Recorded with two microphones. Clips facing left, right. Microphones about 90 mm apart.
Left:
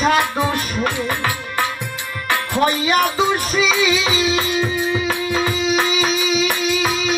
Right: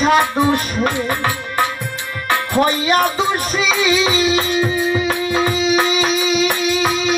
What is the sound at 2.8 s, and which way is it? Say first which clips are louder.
Music: right 1 dB; 5° right (ahead or behind).